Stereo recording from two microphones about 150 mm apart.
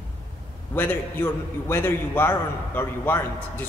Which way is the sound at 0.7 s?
15° left (ahead or behind).